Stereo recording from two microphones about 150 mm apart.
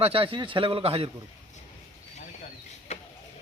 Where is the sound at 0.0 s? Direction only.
40° right (ahead or behind).